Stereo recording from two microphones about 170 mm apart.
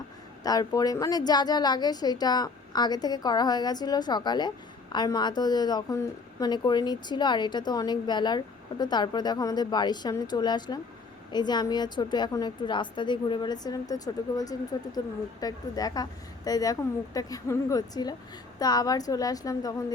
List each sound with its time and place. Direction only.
0.4 s a woman's voice: 20° left (ahead or behind)